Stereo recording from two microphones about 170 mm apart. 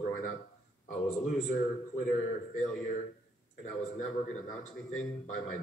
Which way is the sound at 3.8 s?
50° left (ahead or behind).